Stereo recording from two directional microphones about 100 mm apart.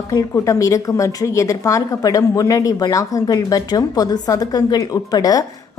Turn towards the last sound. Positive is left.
turn(degrees=40)  # may be behind; listen again after turning